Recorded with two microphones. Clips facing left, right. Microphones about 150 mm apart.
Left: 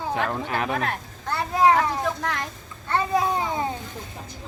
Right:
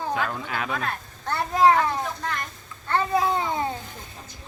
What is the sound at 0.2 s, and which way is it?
Speech, 30° left (ahead or behind).